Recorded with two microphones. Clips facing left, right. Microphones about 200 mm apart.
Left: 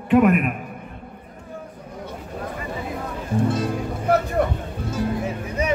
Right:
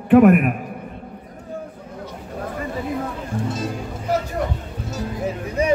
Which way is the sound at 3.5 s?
60° left (ahead or behind).